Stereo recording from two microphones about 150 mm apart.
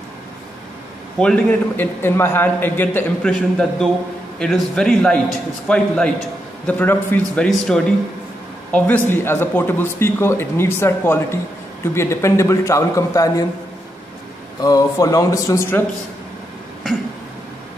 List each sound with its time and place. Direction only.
1.2 s a man's voice: 10° left (ahead or behind)
14.6 s a man's voice: 25° left (ahead or behind)